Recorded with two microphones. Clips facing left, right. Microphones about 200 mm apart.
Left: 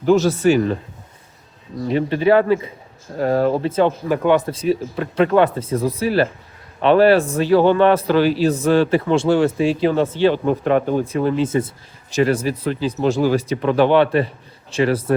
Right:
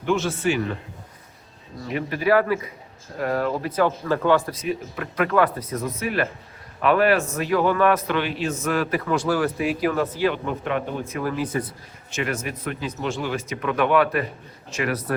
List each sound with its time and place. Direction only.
0.0 s speech: 40° left (ahead or behind)
1.9 s a man's voice: 30° left (ahead or behind)